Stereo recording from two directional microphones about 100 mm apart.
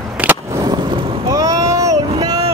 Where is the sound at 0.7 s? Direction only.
50° right (ahead or behind).